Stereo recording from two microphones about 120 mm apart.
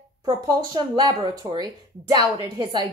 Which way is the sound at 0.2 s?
35° right (ahead or behind).